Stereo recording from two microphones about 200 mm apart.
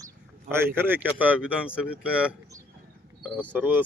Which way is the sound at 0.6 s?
10° right (ahead or behind).